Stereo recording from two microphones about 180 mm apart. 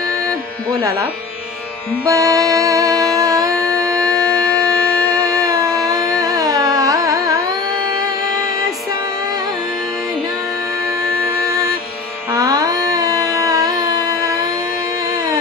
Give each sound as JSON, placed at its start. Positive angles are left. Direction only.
{"t": 0.7, "sound": "speech", "side_deg": -20}
{"t": 2.0, "sound": "music", "side_deg": -20}
{"t": 5.1, "sound": "carnatic music", "side_deg": -20}
{"t": 7.8, "sound": "music", "side_deg": -20}
{"t": 11.2, "sound": "music", "side_deg": -20}
{"t": 12.3, "sound": "carnatic music", "side_deg": -20}